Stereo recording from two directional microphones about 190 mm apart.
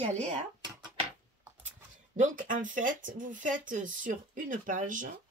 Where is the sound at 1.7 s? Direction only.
40° right (ahead or behind).